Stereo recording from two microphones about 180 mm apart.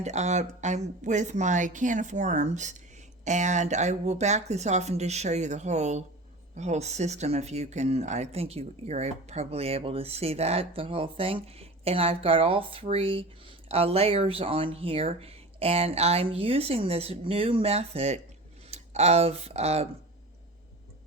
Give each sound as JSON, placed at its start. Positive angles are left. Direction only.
{"t": 0.0, "sound": "speech", "side_deg": -40}